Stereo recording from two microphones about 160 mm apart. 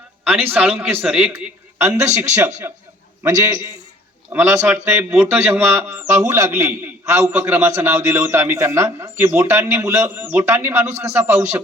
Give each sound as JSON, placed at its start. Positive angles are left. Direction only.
{"t": 0.3, "sound": "a man's voice", "side_deg": -10}